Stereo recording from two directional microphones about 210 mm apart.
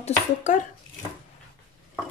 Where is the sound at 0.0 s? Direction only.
35° left (ahead or behind).